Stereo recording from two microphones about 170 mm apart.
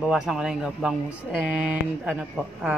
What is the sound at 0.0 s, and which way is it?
Speech, 5° right (ahead or behind).